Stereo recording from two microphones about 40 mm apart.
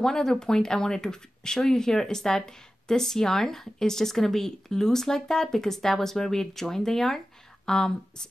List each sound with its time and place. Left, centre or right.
0.0 s speech: centre